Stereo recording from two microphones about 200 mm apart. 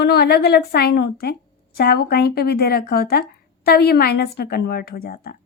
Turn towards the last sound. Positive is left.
turn(degrees=50)  # may be behind; listen again after turning